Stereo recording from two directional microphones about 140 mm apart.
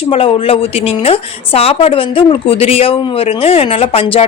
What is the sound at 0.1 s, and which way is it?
A woman's voice, 40° left (ahead or behind).